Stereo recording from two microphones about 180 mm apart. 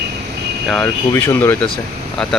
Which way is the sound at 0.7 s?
5° left (ahead or behind).